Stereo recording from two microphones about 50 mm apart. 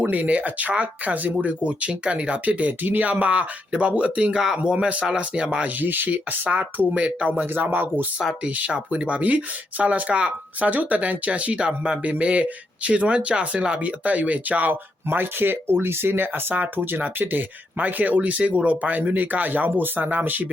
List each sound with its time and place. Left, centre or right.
0.1 s speech: right
5.8 s speech: right
7.3 s speech: right
8.4 s speech: right